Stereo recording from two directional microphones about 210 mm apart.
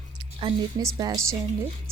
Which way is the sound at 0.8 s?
15° right (ahead or behind).